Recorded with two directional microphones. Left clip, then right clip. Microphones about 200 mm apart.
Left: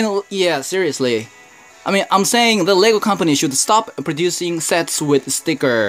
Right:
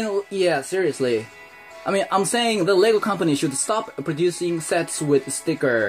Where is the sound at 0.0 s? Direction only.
35° left (ahead or behind).